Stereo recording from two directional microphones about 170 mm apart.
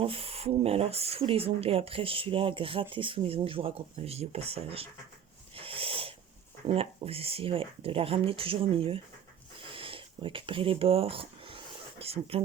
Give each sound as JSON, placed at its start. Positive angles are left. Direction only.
{"t": 0.0, "sound": "speech", "side_deg": -35}
{"t": 5.5, "sound": "wheeze", "side_deg": -35}
{"t": 6.7, "sound": "speech", "side_deg": -35}
{"t": 9.6, "sound": "a sound", "side_deg": -30}